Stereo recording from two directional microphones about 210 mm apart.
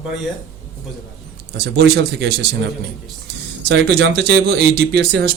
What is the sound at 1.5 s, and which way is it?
Speech, 50° right (ahead or behind).